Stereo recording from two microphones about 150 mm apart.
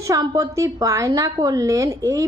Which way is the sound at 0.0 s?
25° right (ahead or behind).